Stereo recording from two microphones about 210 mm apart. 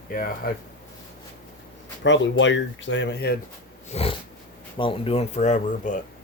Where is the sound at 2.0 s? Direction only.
60° left (ahead or behind).